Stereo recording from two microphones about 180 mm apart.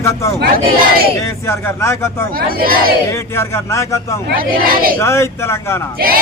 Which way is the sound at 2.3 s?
55° right (ahead or behind).